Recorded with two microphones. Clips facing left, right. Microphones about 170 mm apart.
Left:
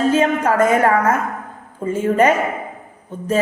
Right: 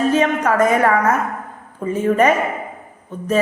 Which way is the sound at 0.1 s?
30° left (ahead or behind).